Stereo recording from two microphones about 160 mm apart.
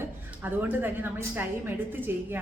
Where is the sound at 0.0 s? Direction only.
10° right (ahead or behind).